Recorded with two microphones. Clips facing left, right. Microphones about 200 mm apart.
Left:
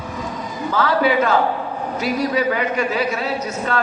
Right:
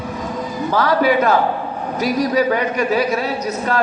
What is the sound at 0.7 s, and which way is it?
A man's voice, 40° right (ahead or behind).